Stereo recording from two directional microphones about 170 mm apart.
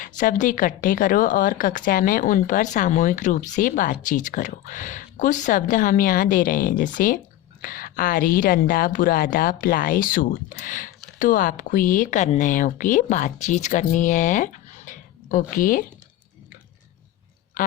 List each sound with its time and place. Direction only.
0.0 s speech: 50° left (ahead or behind)